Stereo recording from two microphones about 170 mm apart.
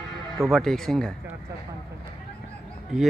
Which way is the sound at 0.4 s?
Centre (ahead or behind).